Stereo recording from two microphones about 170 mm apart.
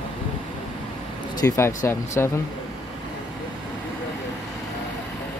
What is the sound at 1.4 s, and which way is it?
Speech, 20° left (ahead or behind).